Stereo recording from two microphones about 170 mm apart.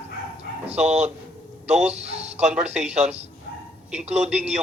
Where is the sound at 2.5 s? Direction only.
5° right (ahead or behind).